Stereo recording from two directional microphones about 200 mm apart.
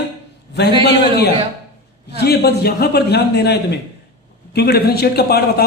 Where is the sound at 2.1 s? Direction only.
55° left (ahead or behind).